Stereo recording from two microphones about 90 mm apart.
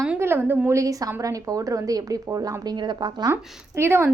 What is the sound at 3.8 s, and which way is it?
Speech, 25° right (ahead or behind).